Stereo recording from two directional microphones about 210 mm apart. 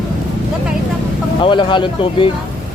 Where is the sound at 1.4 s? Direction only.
25° left (ahead or behind).